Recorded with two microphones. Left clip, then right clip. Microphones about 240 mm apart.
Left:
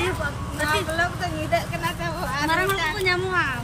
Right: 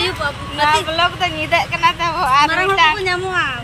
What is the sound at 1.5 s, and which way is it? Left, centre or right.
Speech, centre.